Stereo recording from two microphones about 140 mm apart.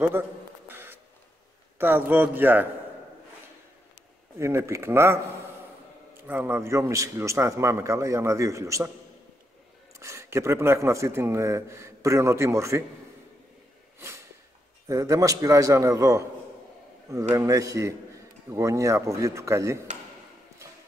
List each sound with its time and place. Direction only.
0.7 s a sound: 15° right (ahead or behind)
1.8 s a man's voice: 15° right (ahead or behind)
4.4 s speech: 20° right (ahead or behind)
6.2 s speech: 15° right (ahead or behind)
9.9 s speech: 20° right (ahead or behind)
13.9 s a sound: 20° right (ahead or behind)
14.9 s speech: 25° right (ahead or behind)